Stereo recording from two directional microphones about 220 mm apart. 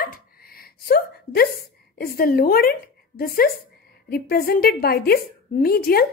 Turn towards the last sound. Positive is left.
turn(degrees=45)  # may be behind; listen again after turning